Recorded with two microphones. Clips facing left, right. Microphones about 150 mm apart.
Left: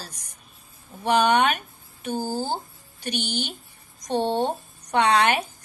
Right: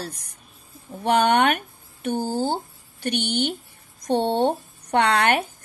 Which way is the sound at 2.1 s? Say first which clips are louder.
Right 2 dB; 25° right (ahead or behind).